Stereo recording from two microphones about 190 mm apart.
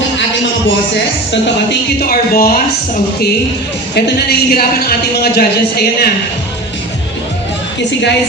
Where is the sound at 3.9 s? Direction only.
60° left (ahead or behind).